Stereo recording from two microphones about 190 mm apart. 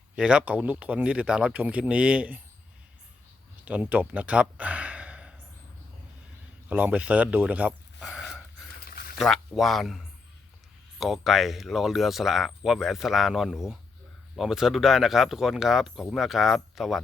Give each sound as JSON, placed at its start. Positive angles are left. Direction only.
{"t": 0.2, "sound": "speech", "side_deg": -5}
{"t": 3.7, "sound": "speech", "side_deg": -10}
{"t": 6.7, "sound": "speech", "side_deg": -5}
{"t": 8.8, "sound": "a sound", "side_deg": 50}
{"t": 9.1, "sound": "speech", "side_deg": 0}